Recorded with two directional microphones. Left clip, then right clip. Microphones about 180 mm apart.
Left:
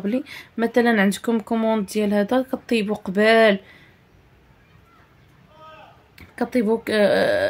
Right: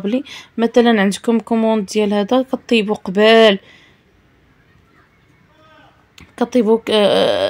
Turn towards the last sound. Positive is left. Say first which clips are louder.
# right 5 dB
turn(degrees=-20)  # may be behind; listen again after turning